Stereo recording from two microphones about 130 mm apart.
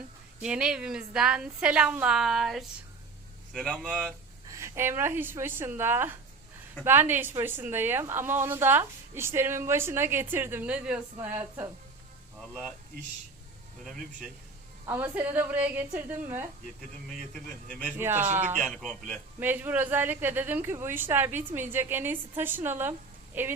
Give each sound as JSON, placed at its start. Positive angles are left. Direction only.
{"t": 0.3, "sound": "a woman's voice", "side_deg": -10}
{"t": 4.4, "sound": "a woman's voice", "side_deg": -20}
{"t": 14.8, "sound": "a woman's voice", "side_deg": -15}
{"t": 17.3, "sound": "a woman's voice", "side_deg": 5}
{"t": 17.8, "sound": "a woman's voice", "side_deg": -15}
{"t": 19.4, "sound": "a woman's voice", "side_deg": -15}